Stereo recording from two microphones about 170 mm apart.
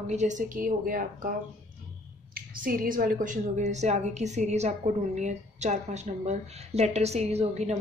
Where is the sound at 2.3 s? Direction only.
55° right (ahead or behind).